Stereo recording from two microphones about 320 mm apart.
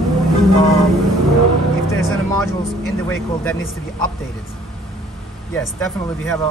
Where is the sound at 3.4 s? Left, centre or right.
Centre.